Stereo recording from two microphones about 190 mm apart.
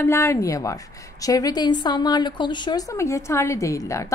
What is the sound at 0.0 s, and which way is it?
A woman's voice, 15° left (ahead or behind).